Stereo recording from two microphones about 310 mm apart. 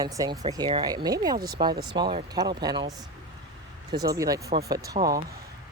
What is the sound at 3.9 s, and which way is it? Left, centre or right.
Speech, centre.